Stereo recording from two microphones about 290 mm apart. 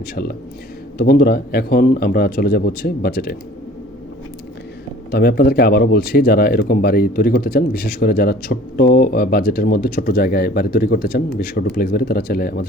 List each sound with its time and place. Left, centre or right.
0.0 s speech: left
5.1 s speech: left